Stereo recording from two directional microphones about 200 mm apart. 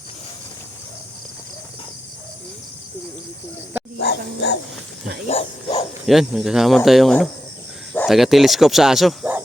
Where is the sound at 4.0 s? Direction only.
60° left (ahead or behind).